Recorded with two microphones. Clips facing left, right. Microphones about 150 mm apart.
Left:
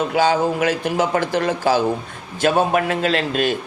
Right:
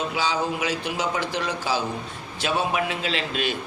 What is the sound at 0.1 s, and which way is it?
Speech, 50° left (ahead or behind).